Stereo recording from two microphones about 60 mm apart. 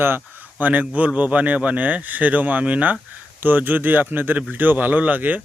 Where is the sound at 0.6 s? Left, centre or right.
Right.